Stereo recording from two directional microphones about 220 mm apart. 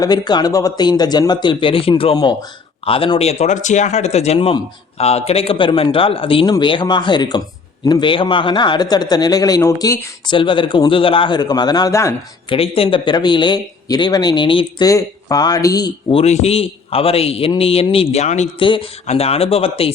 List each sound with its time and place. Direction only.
0.0 s speech: 20° left (ahead or behind)
12.5 s speech: 25° left (ahead or behind)